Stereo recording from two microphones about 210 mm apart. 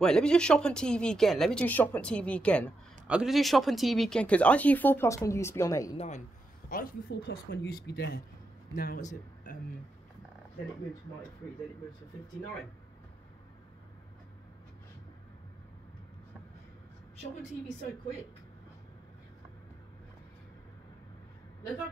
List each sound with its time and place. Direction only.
0.0 s speech: 5° left (ahead or behind)
5.9 s a man's voice: 35° left (ahead or behind)
6.7 s speech: 50° left (ahead or behind)
8.7 s speech: 40° left (ahead or behind)